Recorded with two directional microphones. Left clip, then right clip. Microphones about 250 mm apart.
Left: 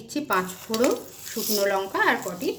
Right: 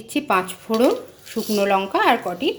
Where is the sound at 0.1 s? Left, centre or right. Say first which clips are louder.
Right 5 dB; centre.